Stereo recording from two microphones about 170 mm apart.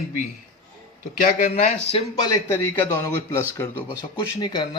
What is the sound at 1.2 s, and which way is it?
Speech, 45° left (ahead or behind).